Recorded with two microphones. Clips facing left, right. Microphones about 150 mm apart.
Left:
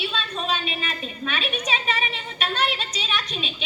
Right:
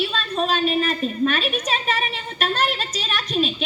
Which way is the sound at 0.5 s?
45° right (ahead or behind).